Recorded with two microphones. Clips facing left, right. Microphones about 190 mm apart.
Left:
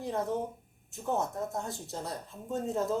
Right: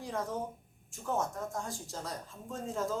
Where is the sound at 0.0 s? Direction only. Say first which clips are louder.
Left 4 dB; 25° left (ahead or behind).